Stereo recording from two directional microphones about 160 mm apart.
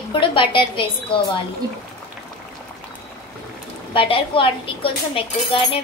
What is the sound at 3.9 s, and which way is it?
Speech, 35° left (ahead or behind).